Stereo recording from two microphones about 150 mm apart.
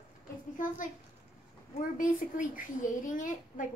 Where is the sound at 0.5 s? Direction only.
60° left (ahead or behind).